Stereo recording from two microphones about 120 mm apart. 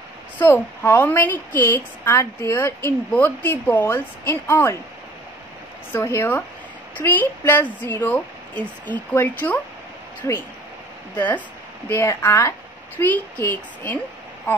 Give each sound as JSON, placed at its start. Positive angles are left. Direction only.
{"t": 0.4, "sound": "a woman's voice", "side_deg": 15}
{"t": 5.9, "sound": "a woman's voice", "side_deg": 20}